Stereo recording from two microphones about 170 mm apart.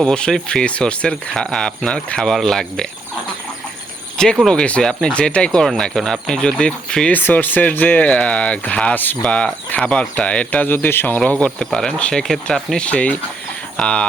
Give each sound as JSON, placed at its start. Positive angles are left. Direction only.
{"t": 0.0, "sound": "speech", "side_deg": 5}
{"t": 4.2, "sound": "speech", "side_deg": 5}